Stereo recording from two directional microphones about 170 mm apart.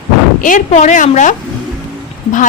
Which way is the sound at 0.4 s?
45° left (ahead or behind).